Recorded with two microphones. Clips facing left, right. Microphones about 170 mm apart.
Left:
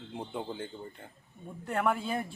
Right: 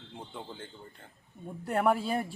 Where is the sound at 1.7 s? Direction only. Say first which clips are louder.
Right 3 dB; 35° right (ahead or behind).